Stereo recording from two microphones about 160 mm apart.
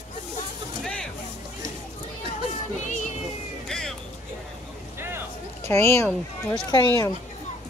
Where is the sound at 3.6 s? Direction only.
5° left (ahead or behind).